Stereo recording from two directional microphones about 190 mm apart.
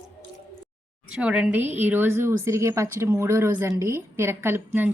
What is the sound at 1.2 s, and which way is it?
Speech, 5° right (ahead or behind).